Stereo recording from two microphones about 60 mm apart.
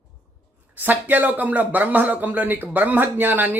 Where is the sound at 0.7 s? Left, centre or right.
Right.